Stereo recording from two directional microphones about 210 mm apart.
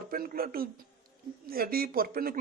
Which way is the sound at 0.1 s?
45° right (ahead or behind).